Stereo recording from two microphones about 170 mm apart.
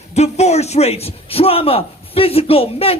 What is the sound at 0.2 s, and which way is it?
A man's voice, 40° left (ahead or behind).